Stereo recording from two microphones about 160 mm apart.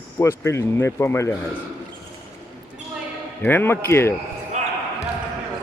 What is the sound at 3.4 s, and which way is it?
Speech, 10° left (ahead or behind).